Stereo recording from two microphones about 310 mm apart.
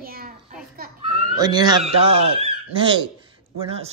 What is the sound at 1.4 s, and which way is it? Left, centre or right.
Speech, centre.